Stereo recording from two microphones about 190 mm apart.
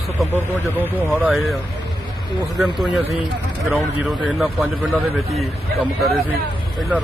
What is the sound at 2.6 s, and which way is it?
A man's voice, centre (ahead or behind).